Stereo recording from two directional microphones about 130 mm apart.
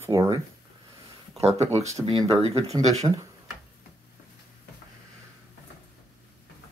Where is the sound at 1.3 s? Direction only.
55° right (ahead or behind).